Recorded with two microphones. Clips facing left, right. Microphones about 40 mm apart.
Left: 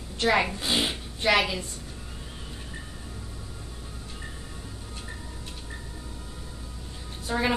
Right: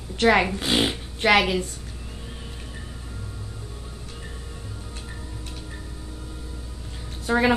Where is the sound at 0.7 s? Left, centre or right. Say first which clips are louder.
Right 4 dB; right.